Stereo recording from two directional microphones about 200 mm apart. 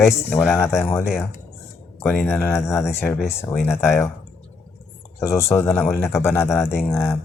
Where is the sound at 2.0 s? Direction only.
10° left (ahead or behind).